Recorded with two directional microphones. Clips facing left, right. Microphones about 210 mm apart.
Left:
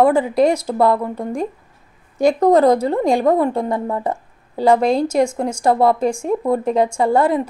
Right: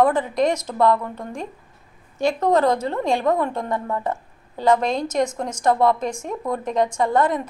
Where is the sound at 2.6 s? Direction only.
35° left (ahead or behind).